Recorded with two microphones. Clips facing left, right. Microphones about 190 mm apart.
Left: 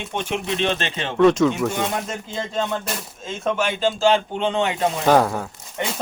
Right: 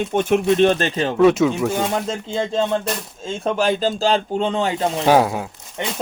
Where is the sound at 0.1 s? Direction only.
50° right (ahead or behind).